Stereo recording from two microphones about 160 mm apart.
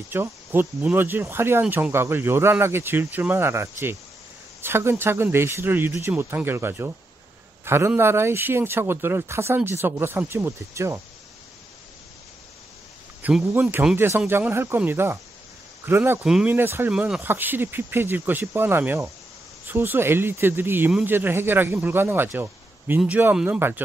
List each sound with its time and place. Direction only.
0.1 s speech: 15° right (ahead or behind)
13.2 s speech: 5° right (ahead or behind)
13.5 s speech: 15° right (ahead or behind)
16.3 s speech: 5° right (ahead or behind)
16.5 s speech: 15° right (ahead or behind)